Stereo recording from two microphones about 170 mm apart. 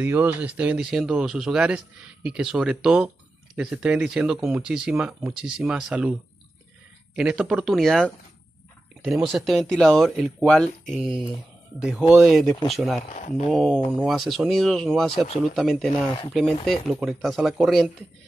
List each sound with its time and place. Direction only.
0.0 s speech: 10° right (ahead or behind)
7.2 s speech: 5° right (ahead or behind)
13.1 s speech: 45° left (ahead or behind)
13.5 s speech: centre (ahead or behind)